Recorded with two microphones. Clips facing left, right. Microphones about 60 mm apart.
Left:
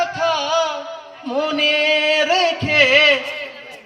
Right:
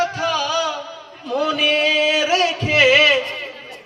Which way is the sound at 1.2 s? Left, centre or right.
Left.